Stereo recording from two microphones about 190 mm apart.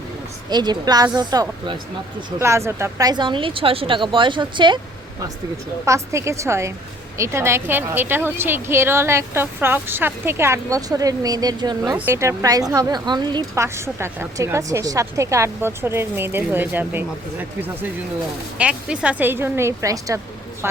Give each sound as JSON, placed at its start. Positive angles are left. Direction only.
{"t": 0.5, "sound": "speech", "side_deg": -20}
{"t": 5.8, "sound": "a woman's voice", "side_deg": -15}
{"t": 18.5, "sound": "a woman's voice", "side_deg": -5}